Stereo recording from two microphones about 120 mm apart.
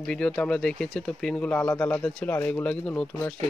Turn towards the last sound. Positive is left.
turn(degrees=10)  # may be behind; listen again after turning